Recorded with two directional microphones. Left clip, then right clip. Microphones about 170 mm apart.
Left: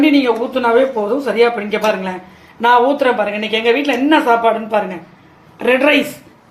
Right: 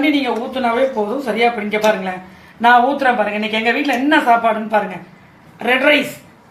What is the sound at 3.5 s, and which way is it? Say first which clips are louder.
A man's voice: left 2 dB; 45° left (ahead or behind).